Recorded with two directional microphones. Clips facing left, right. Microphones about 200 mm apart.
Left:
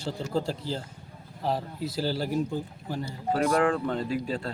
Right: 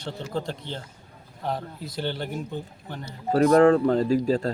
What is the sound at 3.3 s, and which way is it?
Speech, 35° right (ahead or behind).